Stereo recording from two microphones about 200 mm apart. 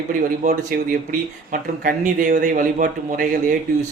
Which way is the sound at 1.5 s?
40° right (ahead or behind).